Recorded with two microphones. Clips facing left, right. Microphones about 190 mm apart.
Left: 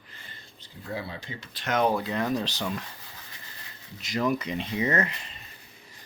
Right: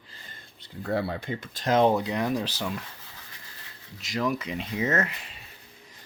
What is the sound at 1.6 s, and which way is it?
Speech, 30° right (ahead or behind).